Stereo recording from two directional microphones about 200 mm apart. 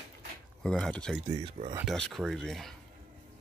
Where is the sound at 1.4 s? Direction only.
30° right (ahead or behind).